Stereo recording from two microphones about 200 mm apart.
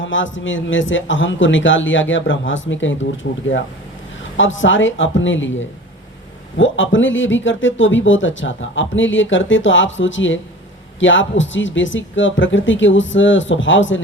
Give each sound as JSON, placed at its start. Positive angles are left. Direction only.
{"t": 0.0, "sound": "speech", "side_deg": 70}